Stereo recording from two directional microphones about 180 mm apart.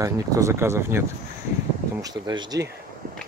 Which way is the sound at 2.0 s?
25° right (ahead or behind).